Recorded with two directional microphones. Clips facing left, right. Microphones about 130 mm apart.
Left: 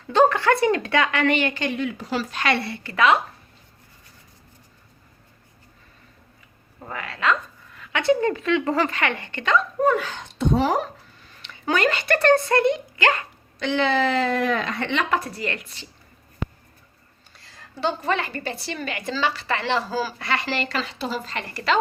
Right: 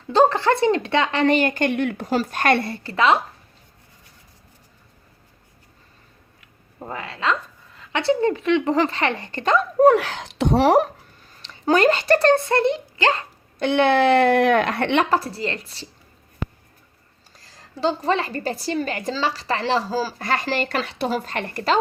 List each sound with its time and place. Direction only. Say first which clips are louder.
0.1 s a woman's voice: right 1 dB; 30° right (ahead or behind)
2.9 s speech: right 1 dB; 25° right (ahead or behind)
6.7 s speech: right 2 dB; 25° right (ahead or behind)
7.8 s a sound: even; 30° right (ahead or behind)
8.3 s speech: right 3 dB; 20° right (ahead or behind); by 9.6 s 35° right (ahead or behind)
9.8 s speech: right 6 dB; 75° right (ahead or behind)
11.4 s speech: right 5 dB; 35° right (ahead or behind)
13.6 s speech: right 4 dB; 60° right (ahead or behind)
15.1 s a woman's voice: right 3 dB; 30° right (ahead or behind)
17.3 s a woman's voice: right 1 dB; 35° right (ahead or behind)